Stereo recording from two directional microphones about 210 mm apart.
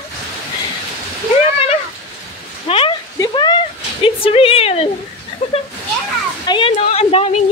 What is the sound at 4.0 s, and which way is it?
Speech, 25° left (ahead or behind).